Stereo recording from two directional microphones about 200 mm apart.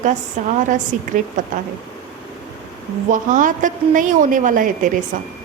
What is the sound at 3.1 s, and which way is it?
A woman's voice, 40° right (ahead or behind).